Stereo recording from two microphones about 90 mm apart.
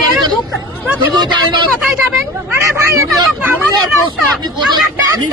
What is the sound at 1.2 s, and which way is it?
Speech, 55° right (ahead or behind).